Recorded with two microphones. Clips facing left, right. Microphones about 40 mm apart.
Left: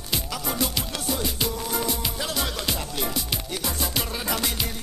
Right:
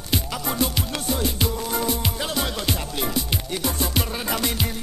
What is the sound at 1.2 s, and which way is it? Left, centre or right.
Music, centre.